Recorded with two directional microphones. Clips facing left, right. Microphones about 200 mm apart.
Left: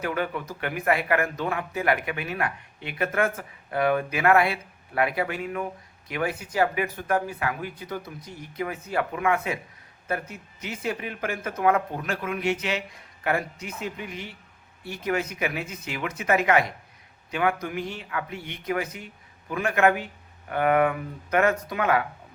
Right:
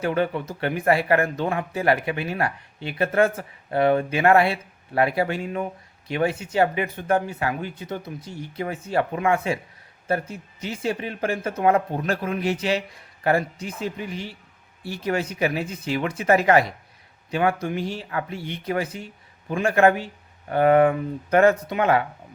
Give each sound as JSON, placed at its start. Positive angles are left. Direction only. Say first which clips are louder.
{"t": 0.0, "sound": "speech", "louder": "right 5 dB", "side_deg": -30}